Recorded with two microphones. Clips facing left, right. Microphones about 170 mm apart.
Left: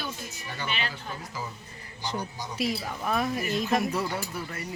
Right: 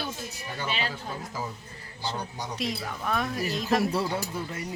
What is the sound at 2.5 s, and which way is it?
A woman's voice, 5° left (ahead or behind).